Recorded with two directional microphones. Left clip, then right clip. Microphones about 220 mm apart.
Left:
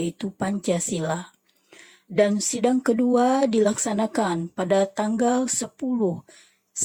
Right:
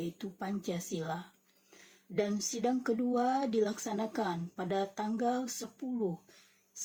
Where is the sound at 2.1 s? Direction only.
45° left (ahead or behind).